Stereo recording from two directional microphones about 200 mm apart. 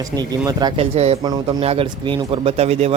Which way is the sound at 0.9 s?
30° right (ahead or behind).